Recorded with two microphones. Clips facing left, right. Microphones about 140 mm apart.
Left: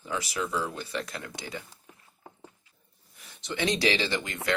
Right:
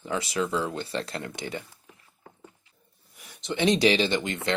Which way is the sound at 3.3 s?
20° right (ahead or behind).